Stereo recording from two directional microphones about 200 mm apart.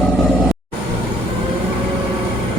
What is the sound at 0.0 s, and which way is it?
Vehicle, centre (ahead or behind).